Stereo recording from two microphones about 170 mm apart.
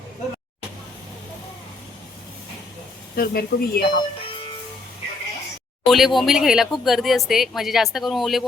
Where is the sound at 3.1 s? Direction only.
60° left (ahead or behind).